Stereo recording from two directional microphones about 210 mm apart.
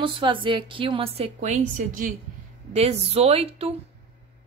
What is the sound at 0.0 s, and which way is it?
A woman's voice, 25° right (ahead or behind).